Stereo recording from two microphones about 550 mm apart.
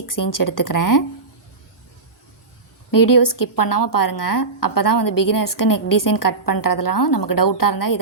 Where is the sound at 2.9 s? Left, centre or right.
Left.